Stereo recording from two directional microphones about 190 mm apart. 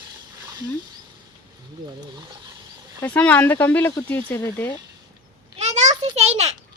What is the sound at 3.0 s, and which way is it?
Speech, 10° left (ahead or behind).